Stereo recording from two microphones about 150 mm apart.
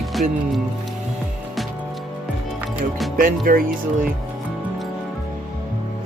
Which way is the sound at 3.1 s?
70° right (ahead or behind).